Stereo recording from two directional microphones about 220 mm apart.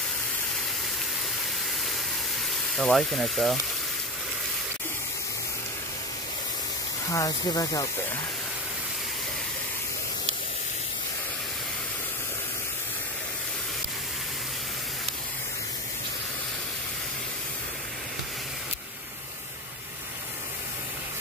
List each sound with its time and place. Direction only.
2.7 s speech: centre (ahead or behind)
7.1 s speech: 15° left (ahead or behind)